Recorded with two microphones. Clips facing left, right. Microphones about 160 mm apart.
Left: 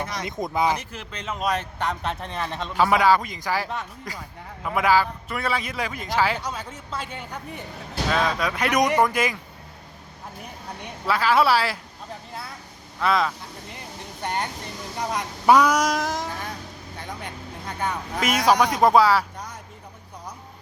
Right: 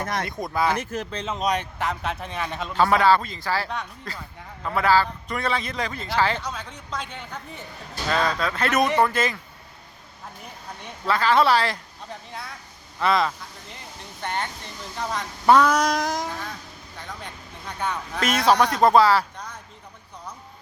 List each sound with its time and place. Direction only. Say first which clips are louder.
0.0 s speech: right 3 dB; 55° right (ahead or behind)
0.3 s speech: left 4 dB; 20° left (ahead or behind)
0.8 s speech: right 9 dB; 45° right (ahead or behind)
1.1 s a man's voice: right 3 dB; 30° right (ahead or behind)
1.8 s a man's voice: even; centre (ahead or behind)
2.7 s a man's voice: even; 10° left (ahead or behind)
11.0 s a man's voice: even; 10° left (ahead or behind)
13.0 s a man's voice: right 1 dB; centre (ahead or behind)
14.2 s a man's voice: left 1 dB; 10° left (ahead or behind)
17.7 s a man's voice: even; 10° left (ahead or behind)